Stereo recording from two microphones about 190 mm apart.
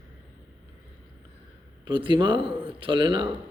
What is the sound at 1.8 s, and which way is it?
Speech, 25° right (ahead or behind).